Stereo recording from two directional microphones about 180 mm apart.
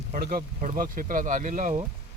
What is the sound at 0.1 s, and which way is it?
Speech, 55° right (ahead or behind).